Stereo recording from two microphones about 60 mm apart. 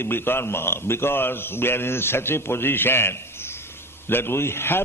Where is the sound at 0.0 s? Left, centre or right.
Left.